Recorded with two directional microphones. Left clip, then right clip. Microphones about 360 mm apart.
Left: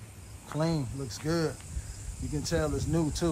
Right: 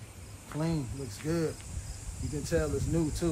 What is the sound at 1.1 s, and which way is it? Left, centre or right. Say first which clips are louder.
Speech: left 2 dB; centre.